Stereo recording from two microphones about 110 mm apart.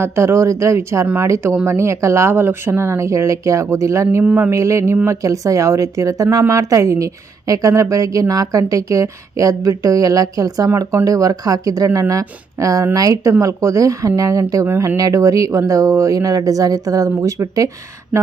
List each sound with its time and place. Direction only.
0.0 s speech: 25° right (ahead or behind)
4.2 s a woman's voice: 15° right (ahead or behind)